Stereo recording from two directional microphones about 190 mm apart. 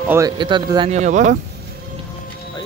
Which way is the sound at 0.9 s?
35° right (ahead or behind).